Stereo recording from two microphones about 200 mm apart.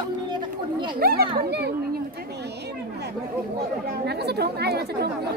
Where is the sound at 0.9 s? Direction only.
50° right (ahead or behind).